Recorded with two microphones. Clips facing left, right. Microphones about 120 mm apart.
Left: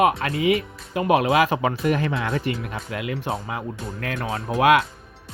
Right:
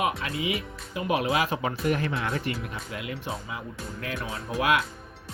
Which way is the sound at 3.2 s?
60° left (ahead or behind).